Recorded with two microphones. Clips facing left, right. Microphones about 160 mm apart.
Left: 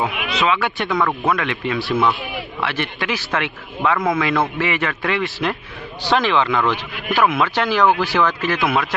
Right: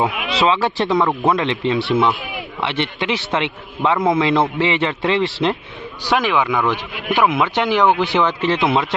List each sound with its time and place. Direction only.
0.3 s a man's voice: 30° right (ahead or behind)
6.1 s a man's voice: 10° right (ahead or behind)